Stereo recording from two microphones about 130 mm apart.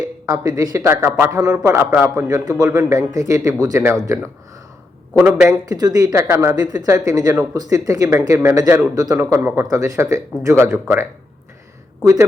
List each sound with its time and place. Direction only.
0.0 s speech: 30° right (ahead or behind)
2.2 s speech: 30° right (ahead or behind)
5.5 s speech: 30° right (ahead or behind)